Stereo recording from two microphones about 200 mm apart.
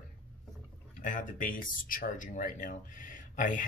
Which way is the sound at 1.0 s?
40° left (ahead or behind).